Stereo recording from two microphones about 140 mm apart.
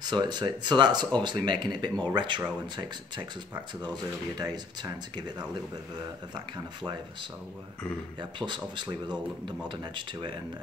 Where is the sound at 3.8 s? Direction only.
30° right (ahead or behind).